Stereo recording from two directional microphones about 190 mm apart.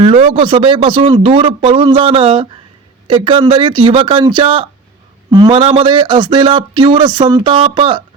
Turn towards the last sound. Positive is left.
turn(degrees=-25)  # may be behind; listen again after turning